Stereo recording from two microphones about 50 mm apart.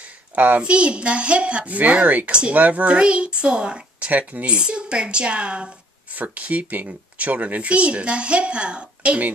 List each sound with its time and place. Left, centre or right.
0.4 s speech: right
4.1 s speech: right